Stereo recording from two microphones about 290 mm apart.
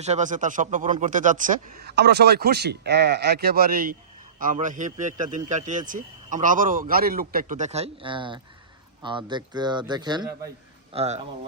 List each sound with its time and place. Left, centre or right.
0.0 s a man's voice: right